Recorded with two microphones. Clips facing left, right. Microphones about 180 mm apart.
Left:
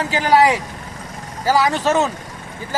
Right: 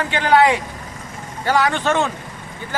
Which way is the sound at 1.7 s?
35° left (ahead or behind).